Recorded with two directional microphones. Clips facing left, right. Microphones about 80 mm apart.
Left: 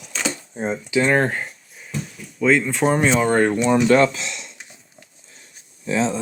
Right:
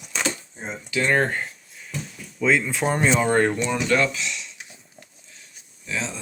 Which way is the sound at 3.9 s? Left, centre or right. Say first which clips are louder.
Left 6 dB; left.